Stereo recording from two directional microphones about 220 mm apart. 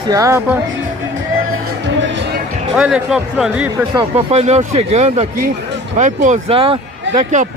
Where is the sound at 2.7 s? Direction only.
Centre (ahead or behind).